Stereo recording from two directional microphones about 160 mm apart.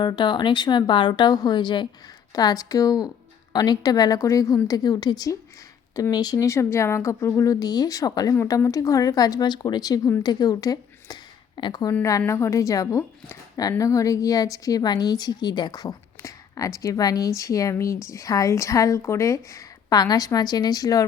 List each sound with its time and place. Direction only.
0.0 s a woman's voice: 30° left (ahead or behind)